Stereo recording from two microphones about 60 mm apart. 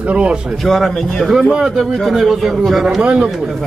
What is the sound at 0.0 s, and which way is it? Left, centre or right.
Speech, right.